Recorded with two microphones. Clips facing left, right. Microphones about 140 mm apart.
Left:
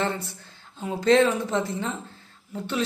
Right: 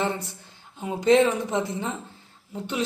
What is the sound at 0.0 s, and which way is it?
A woman's voice, 15° right (ahead or behind).